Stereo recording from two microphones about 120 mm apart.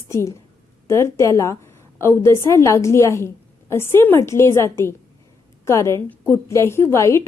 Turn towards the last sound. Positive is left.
turn(degrees=25)  # may be behind; listen again after turning